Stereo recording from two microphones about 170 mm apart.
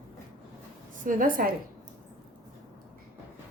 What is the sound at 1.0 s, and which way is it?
Speech, 55° right (ahead or behind).